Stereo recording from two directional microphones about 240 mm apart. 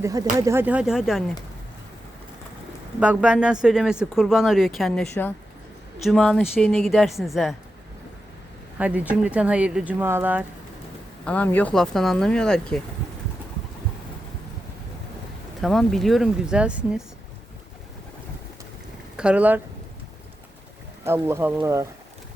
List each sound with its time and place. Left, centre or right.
0.0 s speech: centre
3.0 s speech: centre
8.8 s speech: centre
11.3 s speech: centre
15.6 s speech: centre
19.1 s speech: centre
21.0 s speech: centre